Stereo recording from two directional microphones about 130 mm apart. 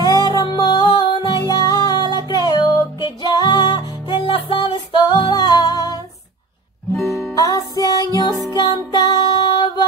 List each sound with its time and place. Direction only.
0.0 s music: 30° left (ahead or behind)
7.0 s music: 20° left (ahead or behind)